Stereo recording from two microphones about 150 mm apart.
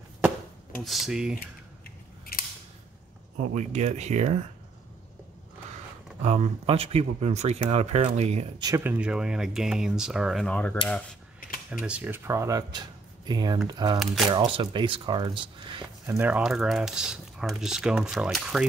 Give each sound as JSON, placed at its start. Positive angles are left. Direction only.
{"t": 0.8, "sound": "speech", "side_deg": 0}
{"t": 3.3, "sound": "speech", "side_deg": -50}
{"t": 6.2, "sound": "speech", "side_deg": -45}
{"t": 8.5, "sound": "speech", "side_deg": -25}
{"t": 8.8, "sound": "speech", "side_deg": -10}
{"t": 11.8, "sound": "speech", "side_deg": -10}
{"t": 13.9, "sound": "speech", "side_deg": 0}
{"t": 14.3, "sound": "speech", "side_deg": -35}
{"t": 16.1, "sound": "speech", "side_deg": -10}